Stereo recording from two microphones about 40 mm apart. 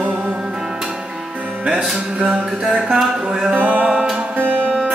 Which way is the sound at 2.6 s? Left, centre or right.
Right.